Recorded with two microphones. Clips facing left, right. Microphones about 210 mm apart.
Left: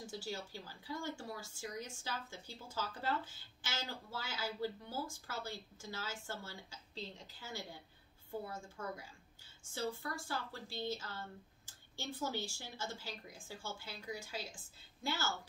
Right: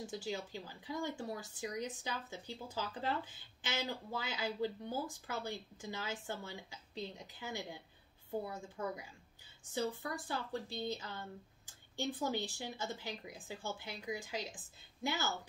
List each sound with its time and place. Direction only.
0.0 s speech: 20° right (ahead or behind)